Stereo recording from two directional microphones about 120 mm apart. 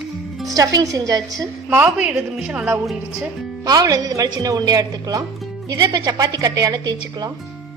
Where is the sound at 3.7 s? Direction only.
30° right (ahead or behind).